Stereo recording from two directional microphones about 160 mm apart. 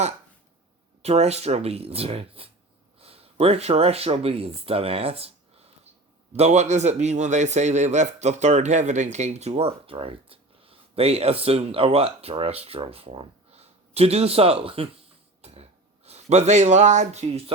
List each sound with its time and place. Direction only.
1.0 s a man's voice: 40° right (ahead or behind)
6.3 s a man's voice: 45° right (ahead or behind)
15.4 s cough: 40° right (ahead or behind)
16.0 s speech: 45° right (ahead or behind)